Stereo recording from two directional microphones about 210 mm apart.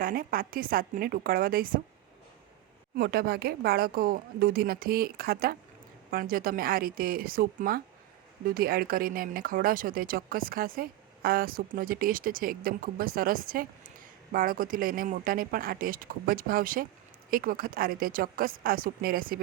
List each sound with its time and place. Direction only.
0.0 s speech: 45° right (ahead or behind)
2.9 s speech: 45° right (ahead or behind)